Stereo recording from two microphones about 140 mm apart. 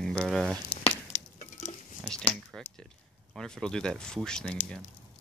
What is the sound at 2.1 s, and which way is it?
Speech, 5° left (ahead or behind).